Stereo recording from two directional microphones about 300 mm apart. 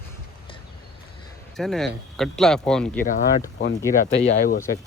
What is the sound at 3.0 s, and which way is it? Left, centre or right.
Speech, left.